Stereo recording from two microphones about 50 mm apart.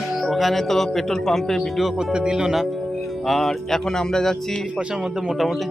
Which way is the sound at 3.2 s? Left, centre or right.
Centre.